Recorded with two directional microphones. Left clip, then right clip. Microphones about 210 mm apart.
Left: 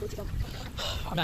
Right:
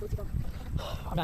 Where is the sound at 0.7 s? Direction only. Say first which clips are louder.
Left 3 dB; centre (ahead or behind).